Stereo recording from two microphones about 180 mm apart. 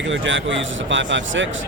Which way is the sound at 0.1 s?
90° right.